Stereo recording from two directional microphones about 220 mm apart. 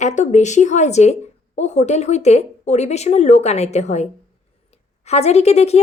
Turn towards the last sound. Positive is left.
turn(degrees=30)  # may be behind; listen again after turning